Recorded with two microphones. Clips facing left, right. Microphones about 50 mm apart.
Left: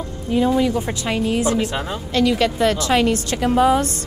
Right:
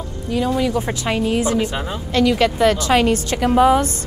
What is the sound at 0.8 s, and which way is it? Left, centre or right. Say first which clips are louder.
A woman's voice: right 1 dB; centre.